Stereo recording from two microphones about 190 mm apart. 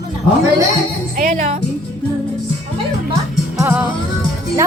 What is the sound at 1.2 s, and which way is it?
Speech, 35° right (ahead or behind).